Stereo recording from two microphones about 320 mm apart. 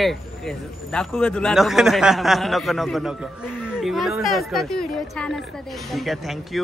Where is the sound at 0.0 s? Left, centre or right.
Centre.